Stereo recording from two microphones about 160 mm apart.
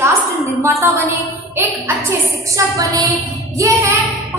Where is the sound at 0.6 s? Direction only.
20° right (ahead or behind).